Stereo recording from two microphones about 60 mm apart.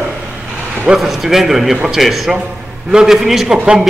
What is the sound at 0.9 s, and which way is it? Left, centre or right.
A man's voice, centre.